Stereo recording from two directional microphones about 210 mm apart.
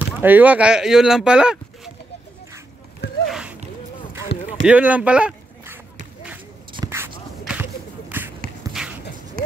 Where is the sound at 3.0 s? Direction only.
50° left (ahead or behind).